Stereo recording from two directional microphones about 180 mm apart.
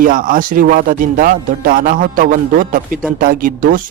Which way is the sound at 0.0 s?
50° right (ahead or behind).